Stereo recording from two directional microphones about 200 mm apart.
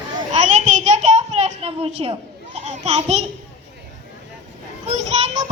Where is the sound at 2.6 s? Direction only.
35° right (ahead or behind).